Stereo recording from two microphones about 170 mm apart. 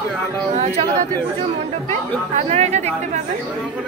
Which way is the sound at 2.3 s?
40° right (ahead or behind).